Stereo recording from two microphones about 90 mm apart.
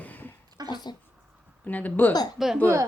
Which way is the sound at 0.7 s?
55° left (ahead or behind).